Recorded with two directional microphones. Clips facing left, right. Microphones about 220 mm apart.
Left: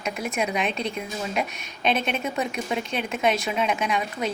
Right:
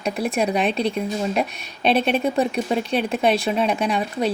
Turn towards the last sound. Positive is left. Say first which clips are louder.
# right 5 dB
turn(degrees=-35)  # may be behind; listen again after turning